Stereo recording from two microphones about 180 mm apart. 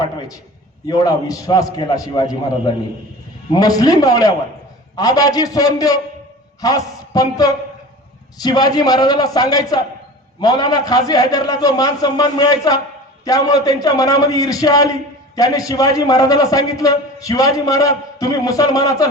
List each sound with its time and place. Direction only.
0.9 s a man's voice: 20° left (ahead or behind)
3.5 s a man's voice: 20° left (ahead or behind)